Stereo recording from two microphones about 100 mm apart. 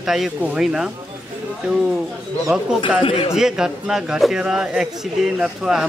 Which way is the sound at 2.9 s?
70° left (ahead or behind).